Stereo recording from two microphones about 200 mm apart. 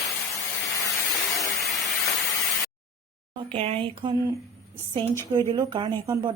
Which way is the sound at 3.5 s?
30° right (ahead or behind).